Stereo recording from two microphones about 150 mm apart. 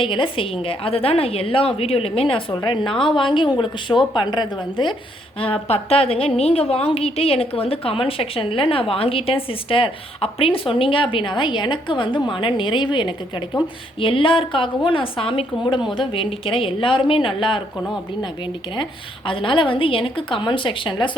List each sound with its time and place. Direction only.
0.0 s a woman's voice: 35° left (ahead or behind)
18.8 s a woman's voice: 35° left (ahead or behind)